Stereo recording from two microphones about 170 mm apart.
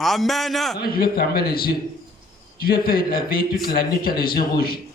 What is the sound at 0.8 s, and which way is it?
A man's voice, 60° left (ahead or behind).